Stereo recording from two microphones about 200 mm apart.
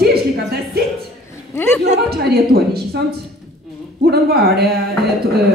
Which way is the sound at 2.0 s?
50° right (ahead or behind).